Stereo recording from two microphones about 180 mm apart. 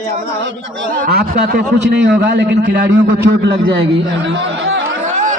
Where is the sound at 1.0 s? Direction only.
60° right (ahead or behind).